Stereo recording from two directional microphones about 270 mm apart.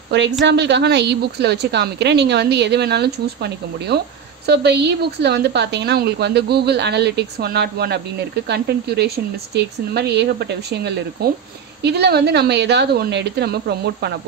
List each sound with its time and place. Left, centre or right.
0.1 s a woman's voice: right